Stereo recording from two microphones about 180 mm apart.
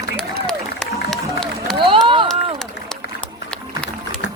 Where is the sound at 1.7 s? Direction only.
25° right (ahead or behind).